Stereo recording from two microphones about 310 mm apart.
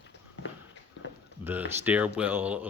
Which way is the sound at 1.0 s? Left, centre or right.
Left.